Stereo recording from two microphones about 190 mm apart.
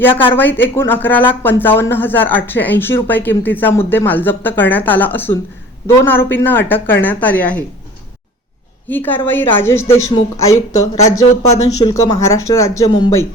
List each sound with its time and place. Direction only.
0.1 s a woman's voice: 25° left (ahead or behind)
0.3 s speech: 10° left (ahead or behind)
8.9 s speech: 10° left (ahead or behind)